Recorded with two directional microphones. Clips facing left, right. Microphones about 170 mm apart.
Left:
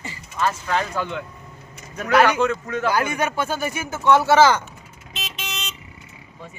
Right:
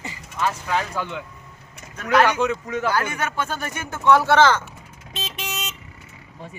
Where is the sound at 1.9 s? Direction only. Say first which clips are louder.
Left 1 dB; 10° left (ahead or behind).